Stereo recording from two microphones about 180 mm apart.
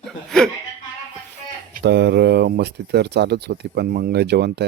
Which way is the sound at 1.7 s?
65° right (ahead or behind).